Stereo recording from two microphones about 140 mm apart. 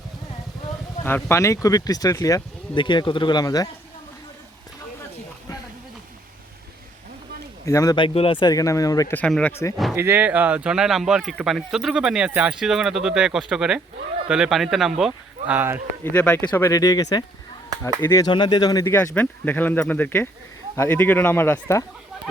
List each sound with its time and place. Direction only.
1.0 s speech: 15° left (ahead or behind)
7.6 s speech: 25° left (ahead or behind)
9.1 s speech: 10° left (ahead or behind)
9.9 s speech: 15° right (ahead or behind)
16.1 s speech: 10° left (ahead or behind)
16.6 s speech: 25° left (ahead or behind)
18.3 s speech: 30° left (ahead or behind)
18.9 s speech: 10° left (ahead or behind)